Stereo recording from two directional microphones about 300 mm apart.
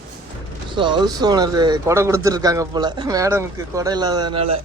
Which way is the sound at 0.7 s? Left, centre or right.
Centre.